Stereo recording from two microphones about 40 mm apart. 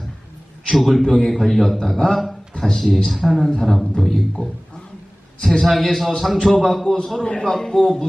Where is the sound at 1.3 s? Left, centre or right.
Centre.